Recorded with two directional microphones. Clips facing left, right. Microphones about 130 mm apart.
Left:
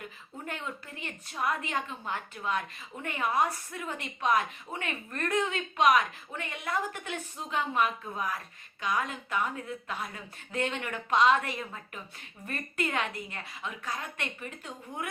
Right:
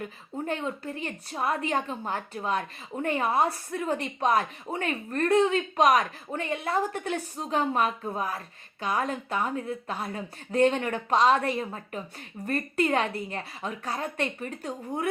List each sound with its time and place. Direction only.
0.4 s a woman's voice: 30° right (ahead or behind)